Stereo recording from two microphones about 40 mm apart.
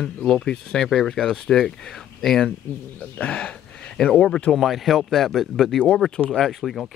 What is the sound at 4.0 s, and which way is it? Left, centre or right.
Speech, centre.